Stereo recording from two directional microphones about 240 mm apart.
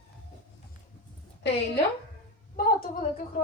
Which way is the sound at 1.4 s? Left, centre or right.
Left.